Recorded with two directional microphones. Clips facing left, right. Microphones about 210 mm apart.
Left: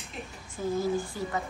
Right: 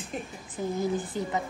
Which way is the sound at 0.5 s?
20° right (ahead or behind).